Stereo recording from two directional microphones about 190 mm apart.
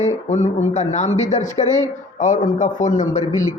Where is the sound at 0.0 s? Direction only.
40° left (ahead or behind).